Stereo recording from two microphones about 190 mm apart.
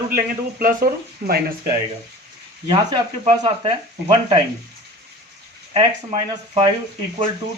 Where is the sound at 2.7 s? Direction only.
20° right (ahead or behind).